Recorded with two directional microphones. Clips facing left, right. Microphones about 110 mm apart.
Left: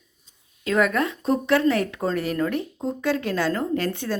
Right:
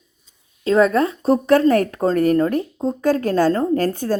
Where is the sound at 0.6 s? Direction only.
30° right (ahead or behind).